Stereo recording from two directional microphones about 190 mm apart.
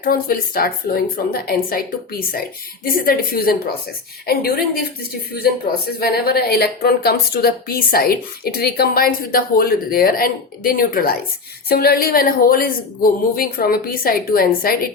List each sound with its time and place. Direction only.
0.0 s speech: 50° left (ahead or behind)